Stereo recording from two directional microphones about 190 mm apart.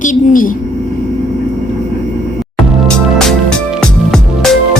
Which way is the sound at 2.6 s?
Centre (ahead or behind).